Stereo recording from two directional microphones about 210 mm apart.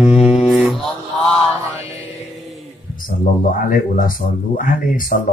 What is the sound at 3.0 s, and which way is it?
Speech, 40° left (ahead or behind).